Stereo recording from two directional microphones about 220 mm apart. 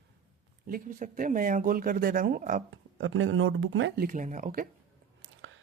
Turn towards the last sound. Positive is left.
turn(degrees=-35)  # may be behind; listen again after turning